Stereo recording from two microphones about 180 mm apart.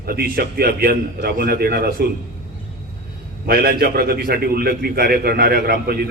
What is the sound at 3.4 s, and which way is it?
A man's voice, 60° right (ahead or behind).